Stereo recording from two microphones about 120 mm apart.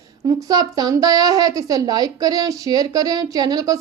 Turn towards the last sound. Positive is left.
turn(degrees=-35)  # may be behind; listen again after turning